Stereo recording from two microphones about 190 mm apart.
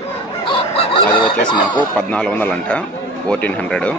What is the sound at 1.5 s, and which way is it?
Speech, 25° left (ahead or behind).